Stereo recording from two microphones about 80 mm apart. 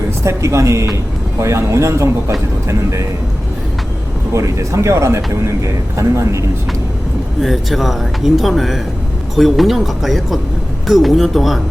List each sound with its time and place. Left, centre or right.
0.3 s speech: right
4.4 s speech: right
7.4 s speech: centre